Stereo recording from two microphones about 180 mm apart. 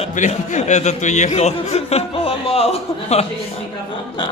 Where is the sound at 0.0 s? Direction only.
40° left (ahead or behind).